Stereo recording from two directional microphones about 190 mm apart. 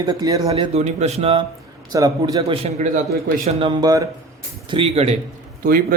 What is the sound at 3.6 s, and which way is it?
Speech, 20° right (ahead or behind).